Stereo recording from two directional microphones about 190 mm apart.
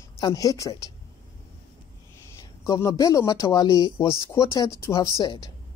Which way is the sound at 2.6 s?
20° left (ahead or behind).